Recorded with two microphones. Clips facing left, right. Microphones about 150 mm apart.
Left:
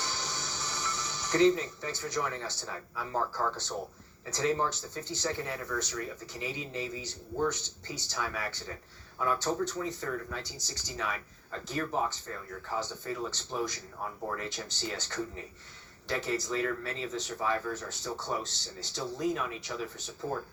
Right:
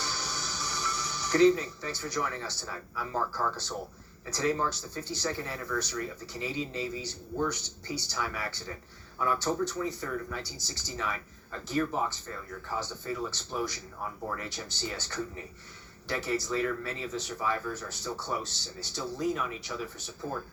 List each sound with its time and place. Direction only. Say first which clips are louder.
0.0 s speech: right 1 dB; 20° left (ahead or behind)